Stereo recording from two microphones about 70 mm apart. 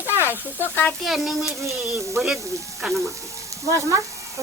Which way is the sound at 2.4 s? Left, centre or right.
Right.